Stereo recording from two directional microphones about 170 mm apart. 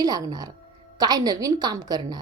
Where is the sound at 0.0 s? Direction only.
20° right (ahead or behind).